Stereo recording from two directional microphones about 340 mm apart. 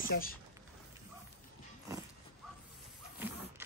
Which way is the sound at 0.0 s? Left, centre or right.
Left.